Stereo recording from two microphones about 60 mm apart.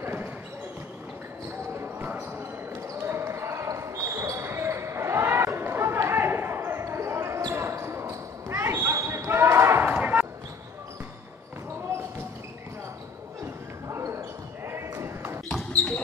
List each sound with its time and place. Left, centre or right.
0.0 s basketball bounce: right
3.0 s basketball bounce: right
9.9 s basketball bounce: right
13.8 s basketball bounce: right
15.7 s basketball bounce: left